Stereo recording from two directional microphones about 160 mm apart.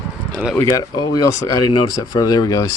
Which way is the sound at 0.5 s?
20° left (ahead or behind).